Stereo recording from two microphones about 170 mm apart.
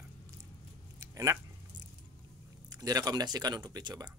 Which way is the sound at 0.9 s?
20° right (ahead or behind).